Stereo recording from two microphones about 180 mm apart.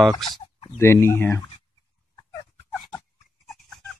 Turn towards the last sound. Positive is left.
turn(degrees=5)  # may be behind; listen again after turning